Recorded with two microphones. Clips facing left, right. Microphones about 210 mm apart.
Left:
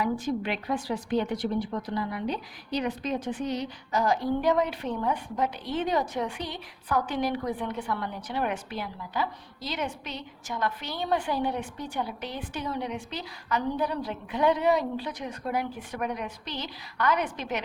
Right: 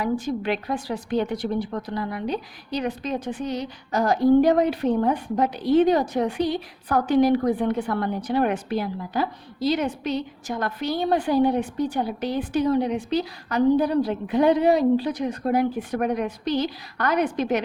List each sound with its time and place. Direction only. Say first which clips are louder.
0.0 s a woman's voice: right 3 dB; 35° right (ahead or behind)